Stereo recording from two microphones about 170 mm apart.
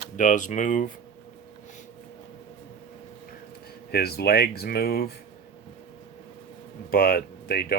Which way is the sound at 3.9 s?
65° left (ahead or behind).